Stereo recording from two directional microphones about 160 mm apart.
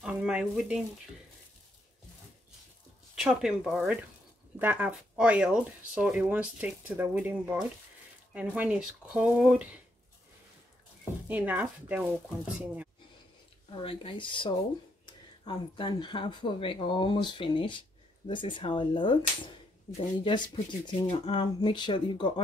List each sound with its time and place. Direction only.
0.0 s a sound: 5° right (ahead or behind)
3.2 s speech: 5° right (ahead or behind)
11.2 s speech: 10° right (ahead or behind)
13.7 s speech: 35° left (ahead or behind)